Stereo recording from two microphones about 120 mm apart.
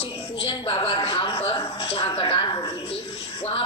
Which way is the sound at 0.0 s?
45° left (ahead or behind).